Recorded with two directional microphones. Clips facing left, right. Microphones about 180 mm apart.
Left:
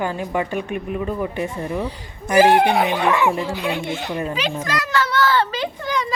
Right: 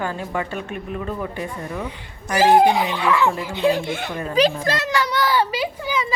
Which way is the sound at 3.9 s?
55° right (ahead or behind).